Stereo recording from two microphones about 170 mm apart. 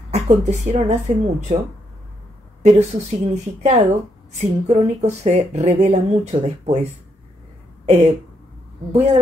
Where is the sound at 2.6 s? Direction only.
40° right (ahead or behind).